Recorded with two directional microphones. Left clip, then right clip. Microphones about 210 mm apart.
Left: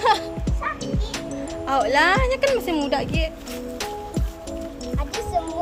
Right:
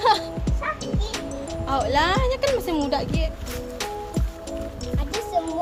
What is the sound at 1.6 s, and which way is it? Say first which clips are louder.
A child's voice: left 3 dB; 15° left (ahead or behind).